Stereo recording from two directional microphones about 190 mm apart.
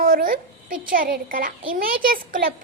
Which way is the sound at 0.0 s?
45° right (ahead or behind).